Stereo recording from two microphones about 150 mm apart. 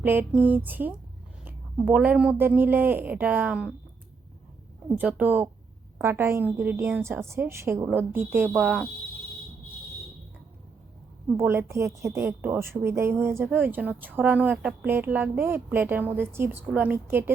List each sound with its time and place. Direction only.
0.0 s a woman's voice: 10° right (ahead or behind)
4.9 s a woman's voice: 10° right (ahead or behind)
11.3 s a woman's voice: 15° right (ahead or behind)